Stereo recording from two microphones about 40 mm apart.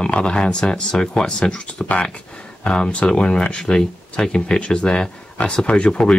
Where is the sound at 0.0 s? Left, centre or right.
Left.